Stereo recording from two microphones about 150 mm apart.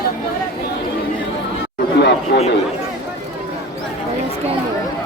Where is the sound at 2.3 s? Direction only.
90° left.